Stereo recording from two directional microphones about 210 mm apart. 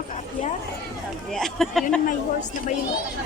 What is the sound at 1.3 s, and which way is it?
Speech, centre (ahead or behind).